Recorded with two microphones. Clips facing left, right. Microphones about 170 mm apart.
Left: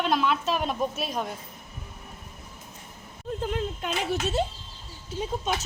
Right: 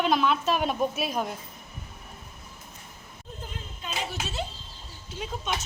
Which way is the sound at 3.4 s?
65° left (ahead or behind).